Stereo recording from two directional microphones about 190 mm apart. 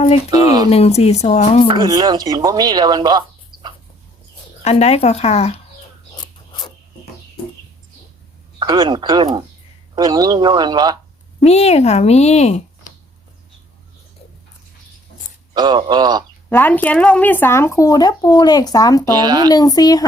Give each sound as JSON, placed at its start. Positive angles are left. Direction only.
{"t": 0.3, "sound": "speech", "side_deg": -20}
{"t": 0.7, "sound": "speech", "side_deg": 35}
{"t": 1.7, "sound": "speech", "side_deg": -20}
{"t": 4.6, "sound": "speech", "side_deg": 35}
{"t": 8.5, "sound": "speech", "side_deg": -25}
{"t": 11.4, "sound": "speech", "side_deg": 35}
{"t": 15.5, "sound": "speech", "side_deg": -20}
{"t": 16.5, "sound": "speech", "side_deg": 10}
{"t": 19.1, "sound": "speech", "side_deg": -20}
{"t": 19.5, "sound": "speech", "side_deg": 20}